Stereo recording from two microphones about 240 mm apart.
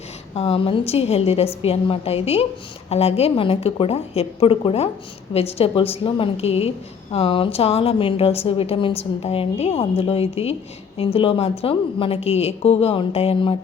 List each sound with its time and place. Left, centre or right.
0.3 s a woman's voice: left